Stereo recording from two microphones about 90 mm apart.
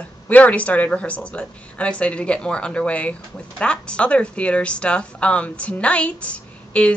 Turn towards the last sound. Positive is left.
turn(degrees=15)  # may be behind; listen again after turning